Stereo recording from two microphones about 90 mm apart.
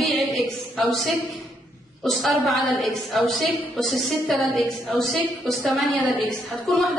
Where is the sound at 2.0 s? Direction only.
Centre (ahead or behind).